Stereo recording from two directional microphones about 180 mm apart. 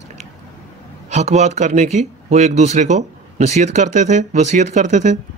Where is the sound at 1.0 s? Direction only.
40° right (ahead or behind).